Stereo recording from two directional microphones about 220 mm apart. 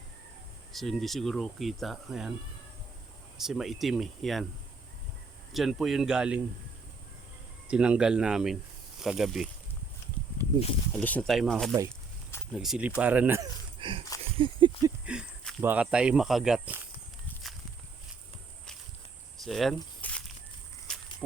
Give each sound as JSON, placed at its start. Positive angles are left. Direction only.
{"t": 0.7, "sound": "speech", "side_deg": 0}
{"t": 3.3, "sound": "speech", "side_deg": 0}
{"t": 5.5, "sound": "speech", "side_deg": 0}
{"t": 7.7, "sound": "speech", "side_deg": -5}
{"t": 10.9, "sound": "speech", "side_deg": 5}
{"t": 13.7, "sound": "a sound", "side_deg": -20}
{"t": 15.0, "sound": "speech", "side_deg": -5}
{"t": 19.4, "sound": "a sound", "side_deg": 0}
{"t": 20.9, "sound": "walk", "side_deg": 5}